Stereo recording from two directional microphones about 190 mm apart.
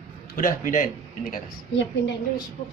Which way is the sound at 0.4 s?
45° left (ahead or behind).